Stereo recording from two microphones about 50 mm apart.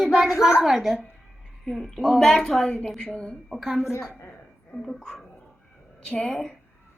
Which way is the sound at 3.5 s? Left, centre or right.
Centre.